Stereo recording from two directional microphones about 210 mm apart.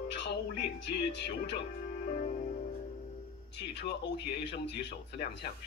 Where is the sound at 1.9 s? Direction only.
40° left (ahead or behind).